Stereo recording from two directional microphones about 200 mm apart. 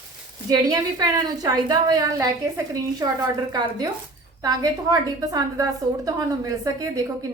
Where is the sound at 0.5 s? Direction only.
20° right (ahead or behind).